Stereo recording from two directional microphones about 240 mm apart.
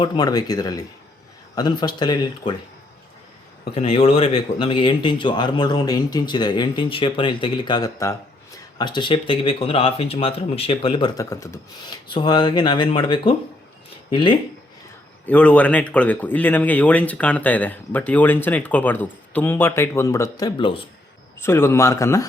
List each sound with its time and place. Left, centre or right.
0.0 s speech: centre
3.8 s speech: left
15.3 s speech: centre